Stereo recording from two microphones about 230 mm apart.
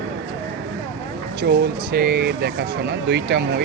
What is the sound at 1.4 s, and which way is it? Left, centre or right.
Speech, right.